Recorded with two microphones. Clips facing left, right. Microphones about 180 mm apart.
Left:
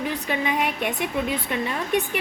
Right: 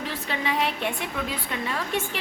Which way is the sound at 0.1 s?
15° left (ahead or behind).